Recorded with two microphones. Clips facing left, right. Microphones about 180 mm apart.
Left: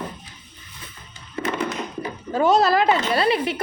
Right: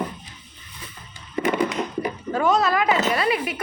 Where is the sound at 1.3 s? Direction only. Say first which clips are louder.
Right 4 dB; 15° right (ahead or behind).